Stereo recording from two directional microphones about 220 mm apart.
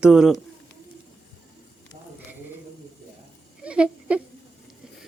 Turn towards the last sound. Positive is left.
turn(degrees=-5)  # may be behind; listen again after turning